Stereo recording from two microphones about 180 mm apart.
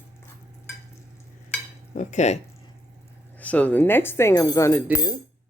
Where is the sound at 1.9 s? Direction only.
40° left (ahead or behind).